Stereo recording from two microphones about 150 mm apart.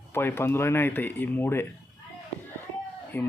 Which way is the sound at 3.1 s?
10° left (ahead or behind).